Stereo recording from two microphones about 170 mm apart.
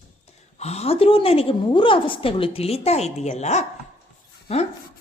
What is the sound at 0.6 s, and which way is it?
A woman's voice, 40° left (ahead or behind).